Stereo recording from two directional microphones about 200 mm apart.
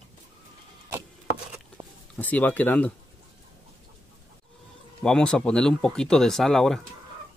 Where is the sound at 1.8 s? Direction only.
25° right (ahead or behind).